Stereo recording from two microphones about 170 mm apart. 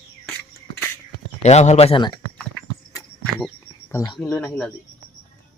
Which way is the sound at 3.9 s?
15° left (ahead or behind).